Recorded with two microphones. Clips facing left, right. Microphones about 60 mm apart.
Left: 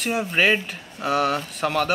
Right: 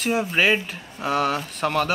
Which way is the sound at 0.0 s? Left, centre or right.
Centre.